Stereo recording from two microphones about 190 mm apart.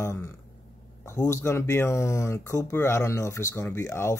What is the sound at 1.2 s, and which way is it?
Speech, 15° left (ahead or behind).